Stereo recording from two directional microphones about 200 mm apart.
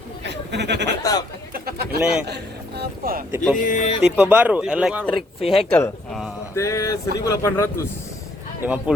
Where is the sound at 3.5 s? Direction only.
40° left (ahead or behind).